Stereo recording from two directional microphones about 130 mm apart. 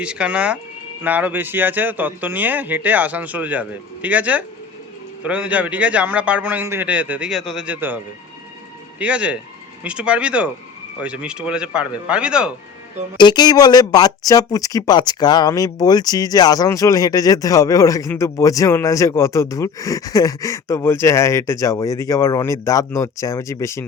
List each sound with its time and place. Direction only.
0.0 s a man's voice: 10° right (ahead or behind)
13.1 s speech: 35° left (ahead or behind)